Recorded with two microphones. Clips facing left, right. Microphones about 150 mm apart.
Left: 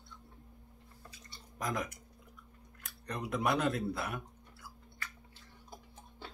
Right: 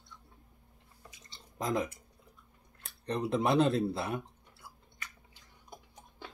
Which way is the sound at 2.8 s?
30° right (ahead or behind).